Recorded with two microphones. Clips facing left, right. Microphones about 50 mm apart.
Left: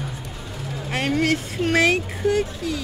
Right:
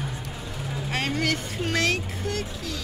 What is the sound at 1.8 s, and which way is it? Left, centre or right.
Speech, centre.